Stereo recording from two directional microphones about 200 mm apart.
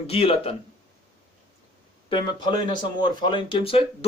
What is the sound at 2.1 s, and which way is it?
Speech, 20° left (ahead or behind).